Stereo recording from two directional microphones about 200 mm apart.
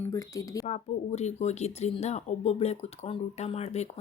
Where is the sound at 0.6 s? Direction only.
35° left (ahead or behind).